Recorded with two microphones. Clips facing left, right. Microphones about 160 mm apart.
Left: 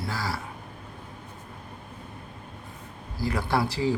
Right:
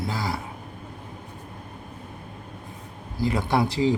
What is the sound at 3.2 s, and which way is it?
Speech, 20° right (ahead or behind).